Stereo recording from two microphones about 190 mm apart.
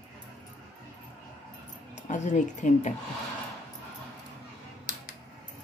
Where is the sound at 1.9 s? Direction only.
40° left (ahead or behind).